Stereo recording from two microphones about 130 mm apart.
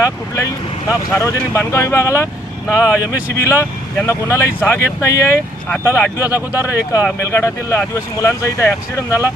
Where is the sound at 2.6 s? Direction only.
10° right (ahead or behind).